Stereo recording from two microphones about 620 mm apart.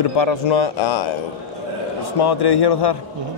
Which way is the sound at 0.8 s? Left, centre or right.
Left.